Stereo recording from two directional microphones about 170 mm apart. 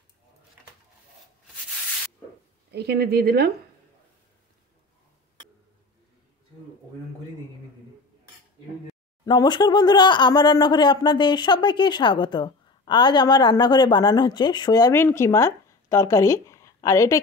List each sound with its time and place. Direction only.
2.7 s a woman's voice: 75° right (ahead or behind)
9.2 s speech: 25° left (ahead or behind)